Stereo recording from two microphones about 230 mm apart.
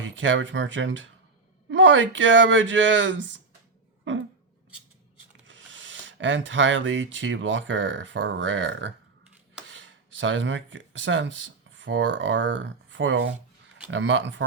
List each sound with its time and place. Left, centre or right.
0.0 s speech: right
4.1 s a sound: right
5.5 s speech: right